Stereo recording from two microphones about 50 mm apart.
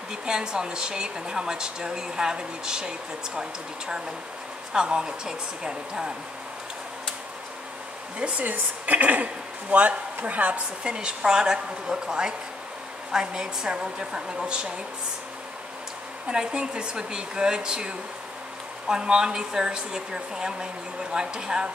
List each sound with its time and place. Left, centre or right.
0.1 s a woman's voice: centre
8.2 s a woman's voice: right
16.3 s a woman's voice: centre